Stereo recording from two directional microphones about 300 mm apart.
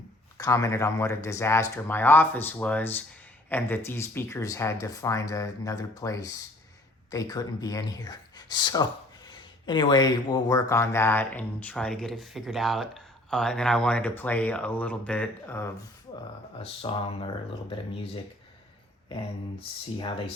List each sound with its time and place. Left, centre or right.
0.3 s speech: centre
16.6 s speech: centre
20.0 s speech: centre